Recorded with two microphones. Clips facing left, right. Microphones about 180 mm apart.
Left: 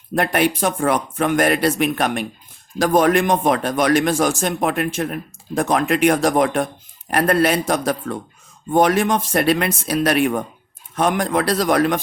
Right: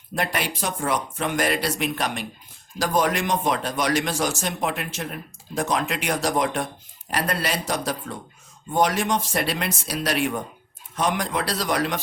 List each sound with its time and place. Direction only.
0.1 s a man's voice: 55° left (ahead or behind)